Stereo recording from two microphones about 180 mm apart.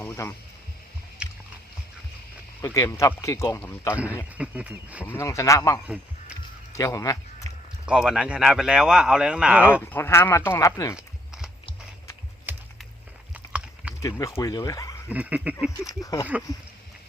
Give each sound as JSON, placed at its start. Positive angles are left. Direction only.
{"t": 0.0, "sound": "a sound", "side_deg": 15}
{"t": 1.2, "sound": "a sound", "side_deg": -5}
{"t": 2.6, "sound": "speech", "side_deg": 15}
{"t": 4.4, "sound": "speech", "side_deg": -5}
{"t": 5.0, "sound": "speech", "side_deg": 15}
{"t": 6.7, "sound": "a sound", "side_deg": 15}
{"t": 7.9, "sound": "speech", "side_deg": -5}
{"t": 9.8, "sound": "speech", "side_deg": 15}
{"t": 10.9, "sound": "walk", "side_deg": -5}
{"t": 12.5, "sound": "a sound", "side_deg": -10}
{"t": 13.3, "sound": "biting", "side_deg": -5}
{"t": 14.0, "sound": "speech", "side_deg": 20}
{"t": 15.1, "sound": "speech", "side_deg": -10}
{"t": 15.8, "sound": "speech", "side_deg": 20}